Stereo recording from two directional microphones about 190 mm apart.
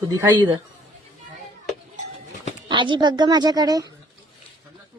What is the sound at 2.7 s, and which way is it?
A woman's voice, 25° right (ahead or behind).